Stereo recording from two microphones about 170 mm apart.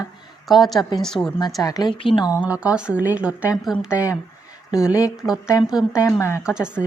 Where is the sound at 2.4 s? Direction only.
5° right (ahead or behind).